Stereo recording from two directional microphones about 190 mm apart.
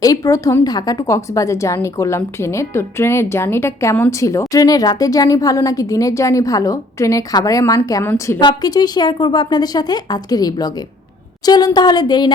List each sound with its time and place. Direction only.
0.0 s a woman's voice: 20° left (ahead or behind)